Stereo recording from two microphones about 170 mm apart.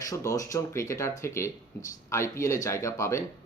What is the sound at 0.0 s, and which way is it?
Speech, 20° left (ahead or behind).